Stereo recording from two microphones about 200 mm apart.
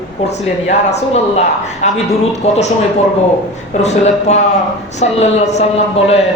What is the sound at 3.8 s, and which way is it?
Speech, 35° left (ahead or behind).